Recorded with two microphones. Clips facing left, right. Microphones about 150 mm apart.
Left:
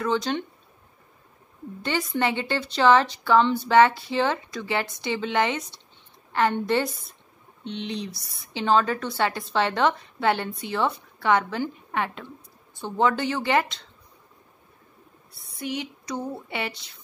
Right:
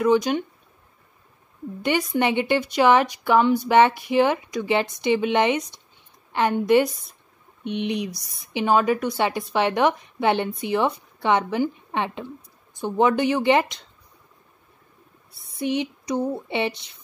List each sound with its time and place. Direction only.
0.0 s a woman's voice: 15° right (ahead or behind)
1.8 s a woman's voice: 15° right (ahead or behind)
15.5 s a sound: 20° right (ahead or behind)